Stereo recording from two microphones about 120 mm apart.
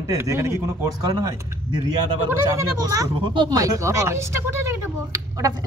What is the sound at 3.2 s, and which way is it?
Speech, 45° right (ahead or behind).